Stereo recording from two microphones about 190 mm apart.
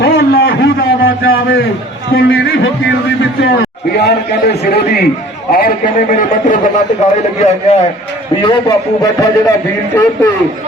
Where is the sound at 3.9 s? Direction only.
60° left (ahead or behind); by 6.7 s 45° left (ahead or behind).